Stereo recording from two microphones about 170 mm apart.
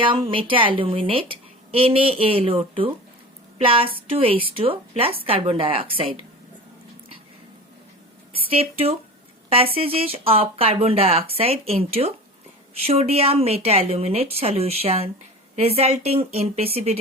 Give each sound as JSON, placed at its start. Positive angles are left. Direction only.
{"t": 0.0, "sound": "speech", "side_deg": -30}
{"t": 8.4, "sound": "speech", "side_deg": -35}